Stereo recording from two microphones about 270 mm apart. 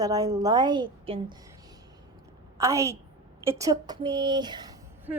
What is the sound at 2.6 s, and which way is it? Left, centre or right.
A woman's voice, centre.